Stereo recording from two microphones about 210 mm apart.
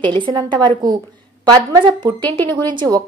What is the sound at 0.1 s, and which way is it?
A woman's voice, 20° right (ahead or behind).